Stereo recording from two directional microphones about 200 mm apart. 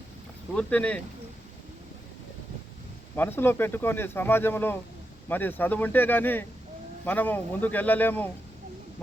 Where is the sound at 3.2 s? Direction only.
10° left (ahead or behind).